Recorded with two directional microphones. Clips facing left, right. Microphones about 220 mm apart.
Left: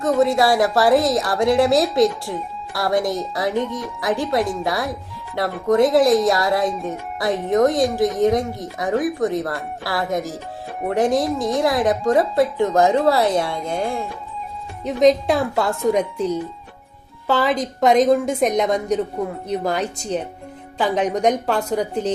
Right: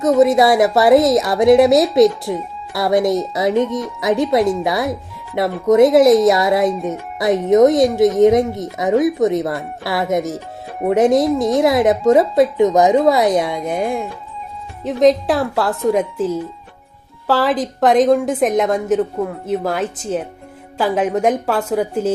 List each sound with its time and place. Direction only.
0.2 s speech: 20° right (ahead or behind)
6.7 s a woman's voice: centre (ahead or behind)
7.5 s speech: 20° right (ahead or behind)
14.8 s a woman's voice: centre (ahead or behind)